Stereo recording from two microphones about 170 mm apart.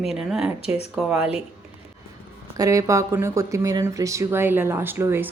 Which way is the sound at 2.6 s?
20° right (ahead or behind).